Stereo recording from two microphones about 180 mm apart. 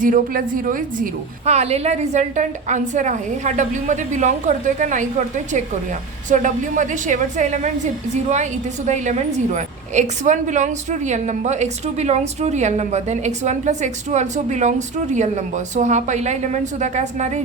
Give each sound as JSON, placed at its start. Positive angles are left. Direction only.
{"t": 0.0, "sound": "a woman's voice", "side_deg": -45}